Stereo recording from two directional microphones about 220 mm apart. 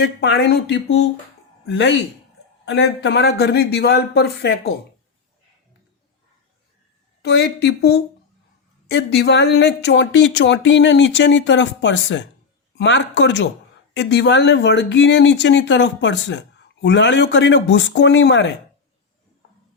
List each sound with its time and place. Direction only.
0.0 s speech: 50° left (ahead or behind)
7.2 s speech: 50° left (ahead or behind)